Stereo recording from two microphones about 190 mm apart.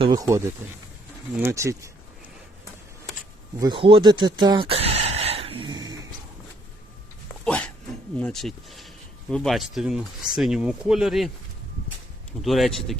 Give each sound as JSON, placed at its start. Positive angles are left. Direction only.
{"t": 0.0, "sound": "speech", "side_deg": -20}
{"t": 3.6, "sound": "a sound", "side_deg": -25}
{"t": 7.4, "sound": "dog", "side_deg": 5}
{"t": 8.2, "sound": "speech", "side_deg": 0}
{"t": 12.4, "sound": "speech", "side_deg": 0}